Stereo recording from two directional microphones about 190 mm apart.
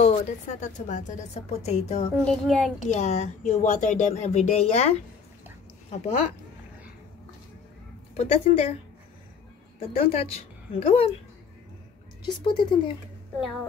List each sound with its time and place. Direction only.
0.0 s speech: 40° left (ahead or behind)
2.2 s a child's voice: centre (ahead or behind)
2.9 s speech: 35° left (ahead or behind)
8.2 s speech: 30° left (ahead or behind)
9.8 s a woman's voice: 30° left (ahead or behind)
12.2 s speech: 25° left (ahead or behind)